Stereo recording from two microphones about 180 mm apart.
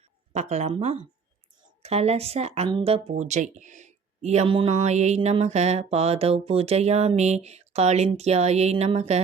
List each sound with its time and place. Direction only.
0.3 s speech: 40° right (ahead or behind)
3.1 s speech: 40° right (ahead or behind)